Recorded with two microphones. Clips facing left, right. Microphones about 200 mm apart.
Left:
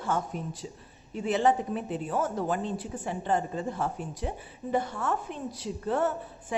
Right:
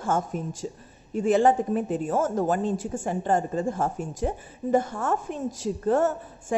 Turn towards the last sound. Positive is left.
turn(degrees=-45)  # may be behind; listen again after turning